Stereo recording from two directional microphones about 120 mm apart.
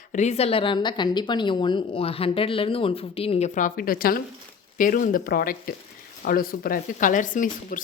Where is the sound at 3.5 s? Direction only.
90° left.